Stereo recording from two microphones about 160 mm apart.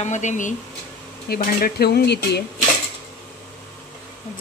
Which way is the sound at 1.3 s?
65° left (ahead or behind).